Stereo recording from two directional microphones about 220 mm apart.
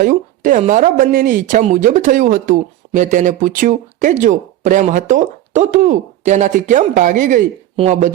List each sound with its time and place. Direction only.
0.0 s speech: 35° right (ahead or behind)